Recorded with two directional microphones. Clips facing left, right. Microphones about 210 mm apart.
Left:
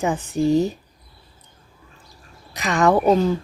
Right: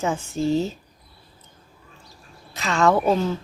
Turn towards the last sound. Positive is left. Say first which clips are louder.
# left 3 dB
turn(degrees=15)  # may be behind; listen again after turning